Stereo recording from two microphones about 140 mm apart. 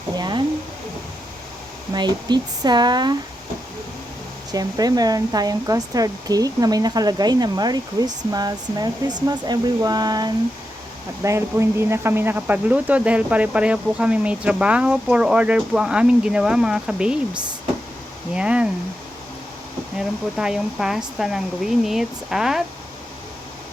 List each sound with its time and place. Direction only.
0.2 s a sound: 35° right (ahead or behind)
1.9 s speech: 30° right (ahead or behind)
4.5 s speech: 25° right (ahead or behind); by 18.7 s 10° right (ahead or behind)
20.0 s speech: 5° right (ahead or behind)